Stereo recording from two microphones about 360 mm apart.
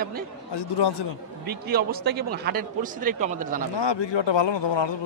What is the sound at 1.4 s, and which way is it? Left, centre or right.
Speech, right.